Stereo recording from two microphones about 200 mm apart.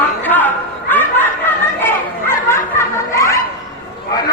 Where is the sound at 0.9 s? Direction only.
10° left (ahead or behind).